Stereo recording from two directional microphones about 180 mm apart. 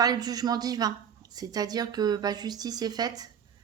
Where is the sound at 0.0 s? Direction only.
20° right (ahead or behind).